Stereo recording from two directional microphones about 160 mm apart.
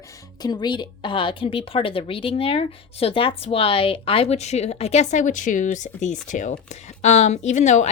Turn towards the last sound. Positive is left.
turn(degrees=45)  # may be behind; listen again after turning